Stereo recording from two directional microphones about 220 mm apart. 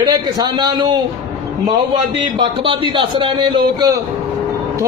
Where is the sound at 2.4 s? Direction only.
25° right (ahead or behind).